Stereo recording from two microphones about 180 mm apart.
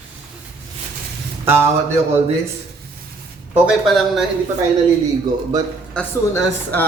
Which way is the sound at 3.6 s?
Centre (ahead or behind).